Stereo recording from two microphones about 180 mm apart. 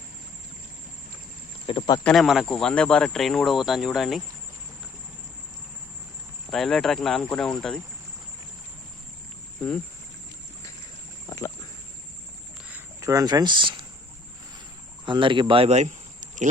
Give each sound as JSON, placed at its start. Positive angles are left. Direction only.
{"t": 1.6, "sound": "speech", "side_deg": 30}
{"t": 2.0, "sound": "speech", "side_deg": 0}
{"t": 6.5, "sound": "speech", "side_deg": 0}
{"t": 9.6, "sound": "speech", "side_deg": 5}
{"t": 11.3, "sound": "rowboat", "side_deg": 20}
{"t": 12.7, "sound": "speech", "side_deg": -15}
{"t": 15.0, "sound": "speech", "side_deg": -25}